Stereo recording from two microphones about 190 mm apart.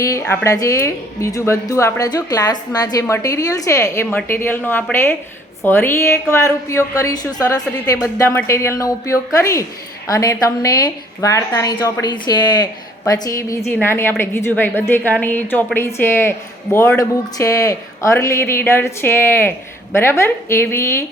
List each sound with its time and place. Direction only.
0.0 s a woman's voice: 15° left (ahead or behind)